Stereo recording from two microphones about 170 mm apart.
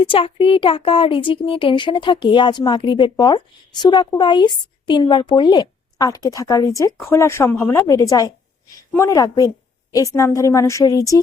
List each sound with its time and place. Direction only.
0.0 s speech: 30° left (ahead or behind)